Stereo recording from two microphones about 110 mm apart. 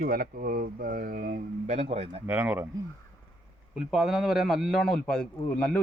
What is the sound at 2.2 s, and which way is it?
Speech, 15° right (ahead or behind).